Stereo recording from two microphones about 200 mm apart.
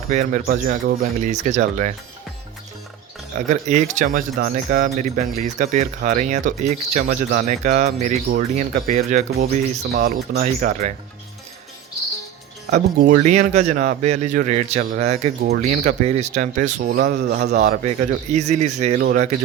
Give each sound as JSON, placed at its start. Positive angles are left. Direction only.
{"t": 0.1, "sound": "speech", "side_deg": -40}
{"t": 3.3, "sound": "speech", "side_deg": -40}
{"t": 12.7, "sound": "speech", "side_deg": -45}
{"t": 17.6, "sound": "speech", "side_deg": -35}